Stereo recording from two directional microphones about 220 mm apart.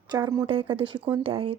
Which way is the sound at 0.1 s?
15° right (ahead or behind).